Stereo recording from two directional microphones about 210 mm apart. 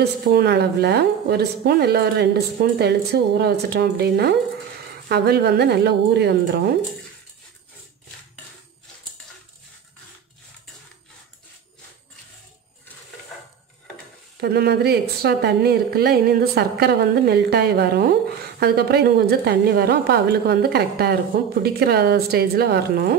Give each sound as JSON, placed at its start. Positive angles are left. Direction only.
{"t": 0.0, "sound": "a woman's voice", "side_deg": -50}
{"t": 14.4, "sound": "a woman's voice", "side_deg": -50}